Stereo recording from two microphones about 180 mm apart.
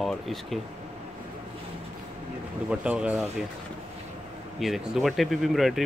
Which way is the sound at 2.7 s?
5° right (ahead or behind).